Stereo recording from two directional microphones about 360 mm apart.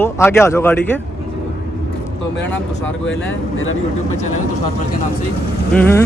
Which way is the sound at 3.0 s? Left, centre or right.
Left.